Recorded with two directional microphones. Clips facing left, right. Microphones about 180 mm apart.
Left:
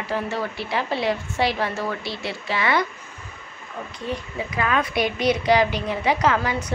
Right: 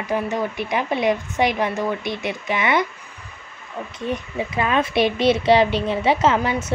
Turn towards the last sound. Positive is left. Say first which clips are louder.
# right 3 dB
turn(degrees=-25)  # may be behind; listen again after turning